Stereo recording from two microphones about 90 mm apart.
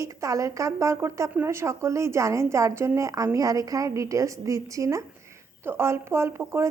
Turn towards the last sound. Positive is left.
turn(degrees=-30)  # may be behind; listen again after turning